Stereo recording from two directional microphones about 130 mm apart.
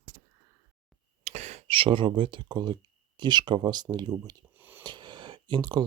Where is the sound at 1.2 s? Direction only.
60° right (ahead or behind).